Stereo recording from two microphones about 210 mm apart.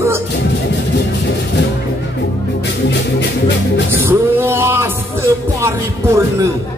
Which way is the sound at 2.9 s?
55° left (ahead or behind).